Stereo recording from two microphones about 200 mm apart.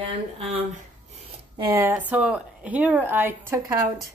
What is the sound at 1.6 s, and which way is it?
A woman's voice, 10° right (ahead or behind).